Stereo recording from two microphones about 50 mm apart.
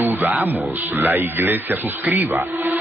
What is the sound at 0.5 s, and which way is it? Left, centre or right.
Speech, right.